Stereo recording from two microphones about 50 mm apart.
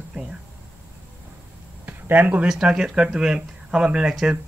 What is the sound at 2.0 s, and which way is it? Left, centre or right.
Speech, right.